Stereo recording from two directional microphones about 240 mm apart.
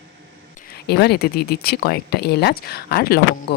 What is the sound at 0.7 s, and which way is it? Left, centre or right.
Speech, left.